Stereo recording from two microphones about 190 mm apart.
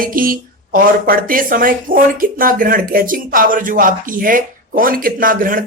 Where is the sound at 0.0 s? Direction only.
50° right (ahead or behind).